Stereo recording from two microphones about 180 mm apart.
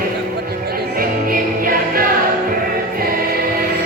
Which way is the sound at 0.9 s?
55° right (ahead or behind).